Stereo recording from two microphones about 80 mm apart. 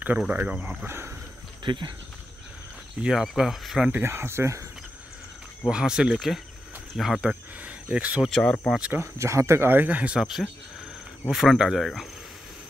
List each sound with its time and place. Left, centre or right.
0.3 s speech: right
0.8 s speech: right
1.6 s speech: right
3.1 s speech: centre
4.0 s speech: right
5.7 s speech: centre
8.3 s speech: centre
8.9 s speech: right
10.1 s speech: centre